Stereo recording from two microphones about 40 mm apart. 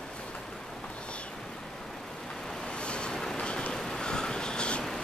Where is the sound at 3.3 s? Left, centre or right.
Left.